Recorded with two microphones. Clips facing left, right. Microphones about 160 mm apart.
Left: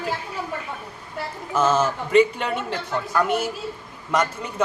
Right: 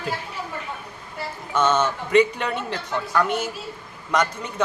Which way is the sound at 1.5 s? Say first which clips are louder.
Left 1 dB; 5° left (ahead or behind).